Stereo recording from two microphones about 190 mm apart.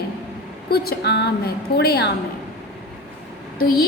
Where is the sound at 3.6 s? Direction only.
55° left (ahead or behind).